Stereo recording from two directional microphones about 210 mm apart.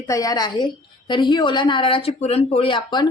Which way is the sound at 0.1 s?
15° left (ahead or behind).